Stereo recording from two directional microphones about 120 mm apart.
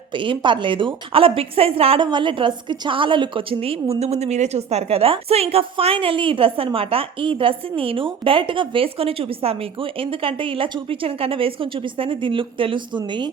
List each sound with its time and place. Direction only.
0.1 s a woman's voice: 45° right (ahead or behind)
2.0 s a woman's voice: 40° right (ahead or behind)